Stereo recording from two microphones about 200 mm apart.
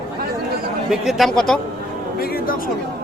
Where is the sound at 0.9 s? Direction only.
Centre (ahead or behind).